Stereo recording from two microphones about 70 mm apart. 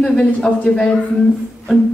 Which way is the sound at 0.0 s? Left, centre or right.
Centre.